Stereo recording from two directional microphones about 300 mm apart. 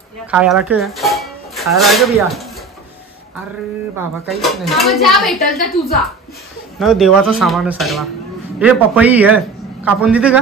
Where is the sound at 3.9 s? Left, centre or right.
Centre.